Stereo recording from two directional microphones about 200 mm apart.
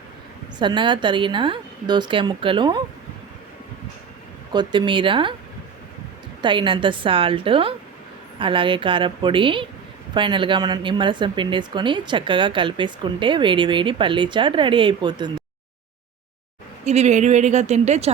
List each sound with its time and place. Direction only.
0.6 s speech: 25° right (ahead or behind)
4.5 s speech: 20° right (ahead or behind)
6.4 s speech: 25° right (ahead or behind)
16.8 s speech: 35° right (ahead or behind)